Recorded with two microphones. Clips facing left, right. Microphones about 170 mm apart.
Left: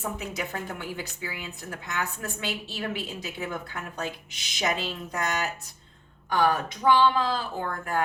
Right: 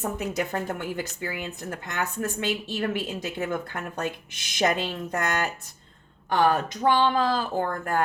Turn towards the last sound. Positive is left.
turn(degrees=-50)  # may be behind; listen again after turning